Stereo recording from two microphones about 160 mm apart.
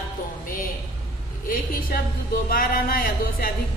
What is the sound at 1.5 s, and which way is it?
Speech, 65° left (ahead or behind).